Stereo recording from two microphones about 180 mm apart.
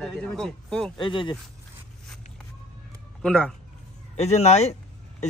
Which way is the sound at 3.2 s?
5° left (ahead or behind).